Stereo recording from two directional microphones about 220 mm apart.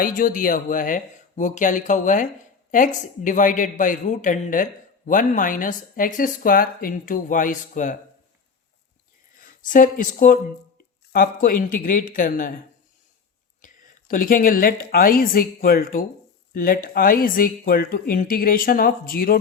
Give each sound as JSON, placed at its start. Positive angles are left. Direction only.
{"t": 0.0, "sound": "speech", "side_deg": 40}
{"t": 9.4, "sound": "speech", "side_deg": 40}
{"t": 13.6, "sound": "a sound", "side_deg": 35}
{"t": 14.1, "sound": "speech", "side_deg": 40}